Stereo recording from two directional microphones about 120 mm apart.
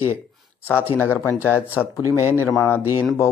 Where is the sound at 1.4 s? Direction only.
15° right (ahead or behind).